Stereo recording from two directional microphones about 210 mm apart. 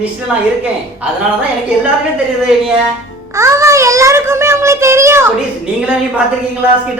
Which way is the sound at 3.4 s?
15° right (ahead or behind).